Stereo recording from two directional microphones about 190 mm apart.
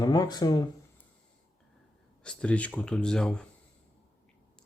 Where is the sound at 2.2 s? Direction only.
5° left (ahead or behind).